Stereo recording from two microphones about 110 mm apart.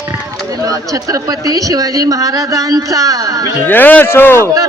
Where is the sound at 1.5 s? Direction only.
35° right (ahead or behind).